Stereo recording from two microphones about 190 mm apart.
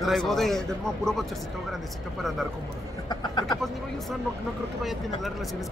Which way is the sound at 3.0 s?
20° left (ahead or behind).